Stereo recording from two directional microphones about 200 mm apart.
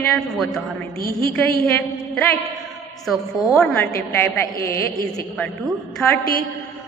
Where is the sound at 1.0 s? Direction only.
15° left (ahead or behind).